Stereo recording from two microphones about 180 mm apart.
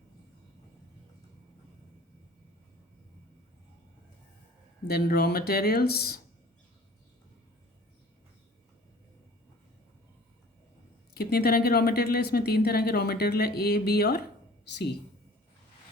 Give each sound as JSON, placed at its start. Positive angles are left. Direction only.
{"t": 4.9, "sound": "speech", "side_deg": 60}
{"t": 11.1, "sound": "speech", "side_deg": 60}
{"t": 14.6, "sound": "a sound", "side_deg": 70}